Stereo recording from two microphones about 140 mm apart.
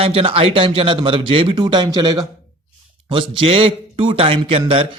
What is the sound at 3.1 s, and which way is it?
A man's voice, 40° right (ahead or behind).